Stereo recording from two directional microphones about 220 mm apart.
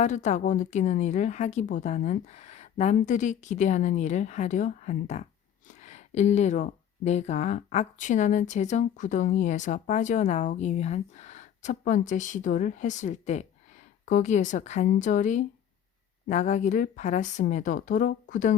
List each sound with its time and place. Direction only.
0.0 s speech: 30° left (ahead or behind)